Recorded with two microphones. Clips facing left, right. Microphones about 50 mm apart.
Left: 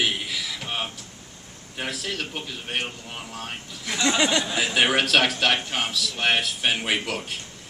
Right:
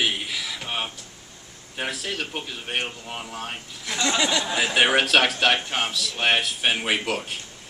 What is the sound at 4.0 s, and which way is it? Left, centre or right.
Speech, centre.